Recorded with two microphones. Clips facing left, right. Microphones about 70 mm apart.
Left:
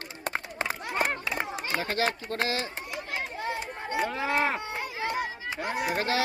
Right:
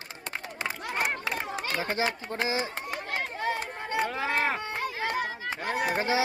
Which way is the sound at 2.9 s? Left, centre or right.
Right.